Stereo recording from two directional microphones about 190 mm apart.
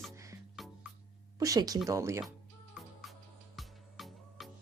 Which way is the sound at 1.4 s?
20° right (ahead or behind).